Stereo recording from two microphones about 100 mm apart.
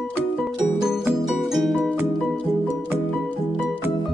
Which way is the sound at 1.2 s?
5° right (ahead or behind).